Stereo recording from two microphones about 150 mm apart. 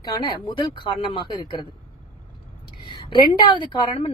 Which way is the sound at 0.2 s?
35° left (ahead or behind).